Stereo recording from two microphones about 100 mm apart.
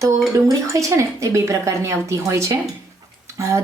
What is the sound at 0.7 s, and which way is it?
A woman's voice, 30° right (ahead or behind).